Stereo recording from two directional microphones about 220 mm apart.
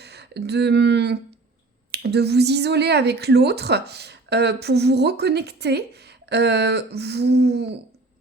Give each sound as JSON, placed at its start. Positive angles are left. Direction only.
{"t": 0.0, "sound": "speech", "side_deg": -50}